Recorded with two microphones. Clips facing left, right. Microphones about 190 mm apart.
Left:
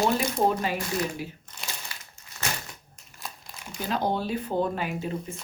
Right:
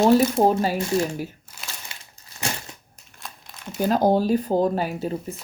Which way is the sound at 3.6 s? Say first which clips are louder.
Right 6 dB; 5° left (ahead or behind).